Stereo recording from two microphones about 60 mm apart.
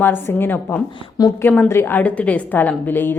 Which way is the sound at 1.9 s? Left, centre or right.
Left.